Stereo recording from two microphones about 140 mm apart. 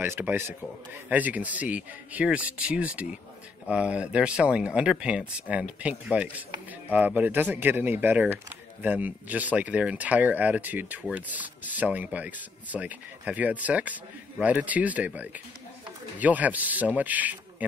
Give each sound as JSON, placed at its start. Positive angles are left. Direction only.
{"t": 0.0, "sound": "speech", "side_deg": -15}